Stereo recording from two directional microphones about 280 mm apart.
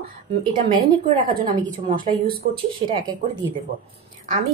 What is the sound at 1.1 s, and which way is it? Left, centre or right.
Speech, right.